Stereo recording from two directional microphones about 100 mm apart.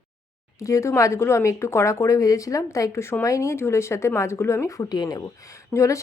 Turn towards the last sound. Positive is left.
turn(degrees=30)  # may be behind; listen again after turning